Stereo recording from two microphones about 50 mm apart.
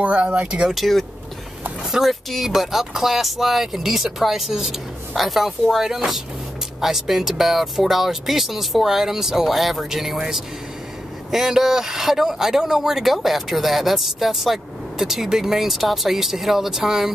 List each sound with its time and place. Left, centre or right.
0.0 s speech: right
0.7 s speech: centre